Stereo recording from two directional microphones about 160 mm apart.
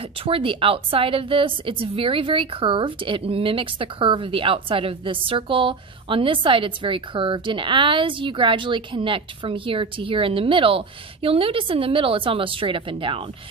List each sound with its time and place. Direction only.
0.2 s a woman's voice: 35° right (ahead or behind)